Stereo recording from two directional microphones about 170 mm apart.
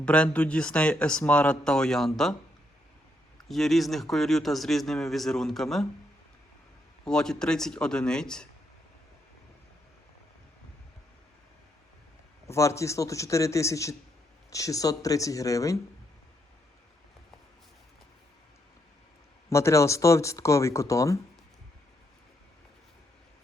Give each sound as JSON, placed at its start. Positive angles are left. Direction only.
{"t": 0.0, "sound": "speech", "side_deg": 5}
{"t": 3.5, "sound": "speech", "side_deg": 0}
{"t": 7.0, "sound": "speech", "side_deg": 5}
{"t": 12.5, "sound": "speech", "side_deg": 15}
{"t": 19.5, "sound": "speech", "side_deg": 15}